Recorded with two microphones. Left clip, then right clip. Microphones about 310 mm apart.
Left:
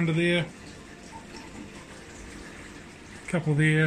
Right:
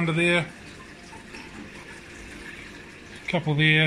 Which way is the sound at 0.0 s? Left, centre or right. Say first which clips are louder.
Right 3 dB; right.